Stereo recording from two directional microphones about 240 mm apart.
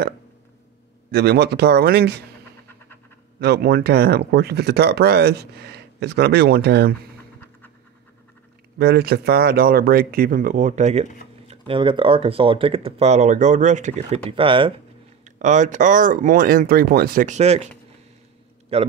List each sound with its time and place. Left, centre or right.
1.1 s speech: right
3.3 s speech: right
8.7 s speech: right
15.2 s speech: right
18.7 s speech: right